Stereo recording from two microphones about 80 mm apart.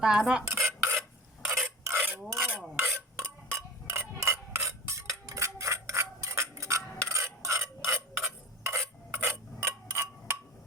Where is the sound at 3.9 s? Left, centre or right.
Right.